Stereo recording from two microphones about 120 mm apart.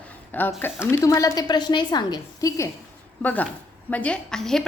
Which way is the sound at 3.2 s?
15° left (ahead or behind).